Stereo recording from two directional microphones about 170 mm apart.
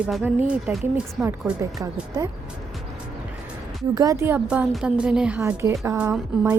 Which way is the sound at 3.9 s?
20° right (ahead or behind).